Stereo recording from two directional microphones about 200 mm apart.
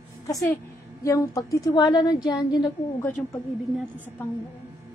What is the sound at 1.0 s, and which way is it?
A woman's voice, 15° left (ahead or behind).